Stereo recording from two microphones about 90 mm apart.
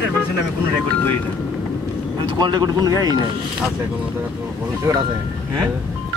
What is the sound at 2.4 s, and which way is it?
Speech, 50° right (ahead or behind).